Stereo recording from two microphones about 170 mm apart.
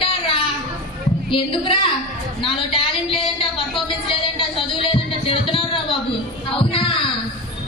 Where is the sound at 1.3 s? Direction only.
30° left (ahead or behind).